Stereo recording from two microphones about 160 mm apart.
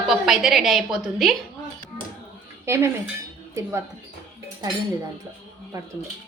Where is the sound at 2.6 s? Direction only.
15° right (ahead or behind).